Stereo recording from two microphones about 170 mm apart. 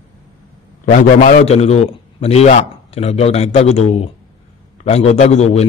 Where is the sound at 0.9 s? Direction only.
50° left (ahead or behind).